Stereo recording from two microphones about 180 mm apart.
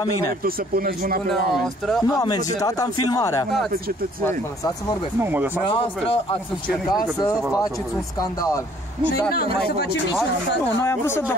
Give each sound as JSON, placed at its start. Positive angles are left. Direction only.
{"t": 0.2, "sound": "speech", "side_deg": -55}
{"t": 1.5, "sound": "speech", "side_deg": 0}
{"t": 2.0, "sound": "speech", "side_deg": 20}
{"t": 5.2, "sound": "speech", "side_deg": -10}
{"t": 6.9, "sound": "speech", "side_deg": 20}
{"t": 10.8, "sound": "speech", "side_deg": 15}